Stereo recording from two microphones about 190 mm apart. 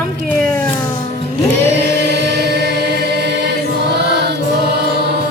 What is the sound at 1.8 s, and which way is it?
Chant, 60° right (ahead or behind).